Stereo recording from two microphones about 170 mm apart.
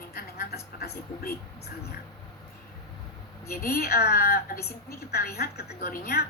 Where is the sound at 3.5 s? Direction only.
65° left (ahead or behind).